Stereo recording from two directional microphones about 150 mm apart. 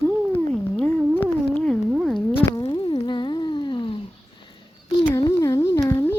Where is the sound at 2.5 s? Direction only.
25° left (ahead or behind).